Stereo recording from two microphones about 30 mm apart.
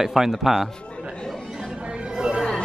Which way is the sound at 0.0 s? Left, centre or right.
Centre.